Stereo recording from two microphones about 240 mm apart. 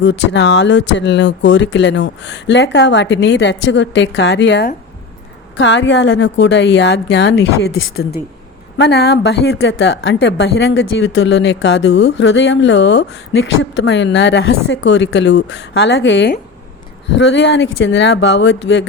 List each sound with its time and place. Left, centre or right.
0.0 s speech: left
8.8 s speech: left